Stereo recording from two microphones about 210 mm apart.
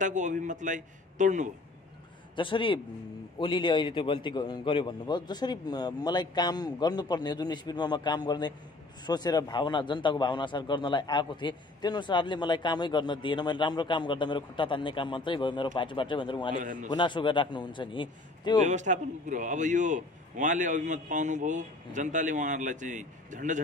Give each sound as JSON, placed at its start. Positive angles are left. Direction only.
{"t": 0.0, "sound": "a man's voice", "side_deg": -35}
{"t": 2.3, "sound": "a man's voice", "side_deg": 25}
{"t": 16.5, "sound": "a man's voice", "side_deg": -40}
{"t": 16.9, "sound": "a man's voice", "side_deg": 20}
{"t": 18.6, "sound": "a man's voice", "side_deg": -35}